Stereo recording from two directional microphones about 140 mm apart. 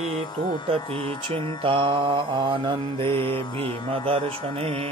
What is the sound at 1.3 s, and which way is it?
Mantra, 40° right (ahead or behind).